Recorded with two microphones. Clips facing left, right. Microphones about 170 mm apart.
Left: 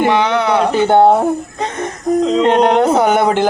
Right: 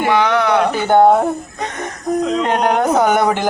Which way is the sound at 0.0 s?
25° left (ahead or behind).